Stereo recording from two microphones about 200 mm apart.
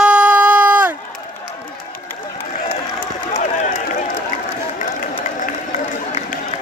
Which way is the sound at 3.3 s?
40° left (ahead or behind).